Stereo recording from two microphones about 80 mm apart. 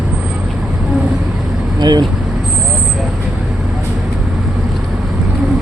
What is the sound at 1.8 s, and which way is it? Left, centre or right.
Vehicle, right.